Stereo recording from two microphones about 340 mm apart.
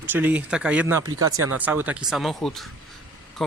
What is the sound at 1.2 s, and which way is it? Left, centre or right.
Speech, right.